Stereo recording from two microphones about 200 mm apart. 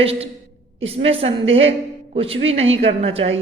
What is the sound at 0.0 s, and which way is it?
A woman's voice, 30° right (ahead or behind).